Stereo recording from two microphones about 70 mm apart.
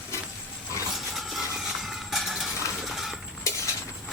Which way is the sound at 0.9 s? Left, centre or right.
Centre.